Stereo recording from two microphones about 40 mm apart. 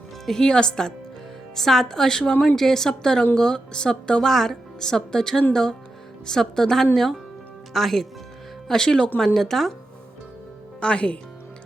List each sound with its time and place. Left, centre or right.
0.3 s speech: centre
8.6 s speech: centre
10.8 s speech: left